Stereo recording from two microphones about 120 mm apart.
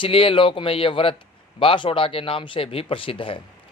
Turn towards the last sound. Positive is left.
turn(degrees=50)  # may be behind; listen again after turning